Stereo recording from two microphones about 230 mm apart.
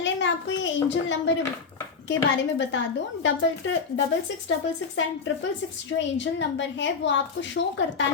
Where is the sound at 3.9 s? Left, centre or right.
Left.